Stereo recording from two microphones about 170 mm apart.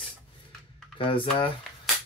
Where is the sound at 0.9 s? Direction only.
30° left (ahead or behind).